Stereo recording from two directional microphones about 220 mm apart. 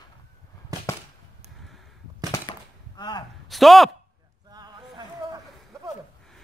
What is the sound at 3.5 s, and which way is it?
Speech, centre (ahead or behind).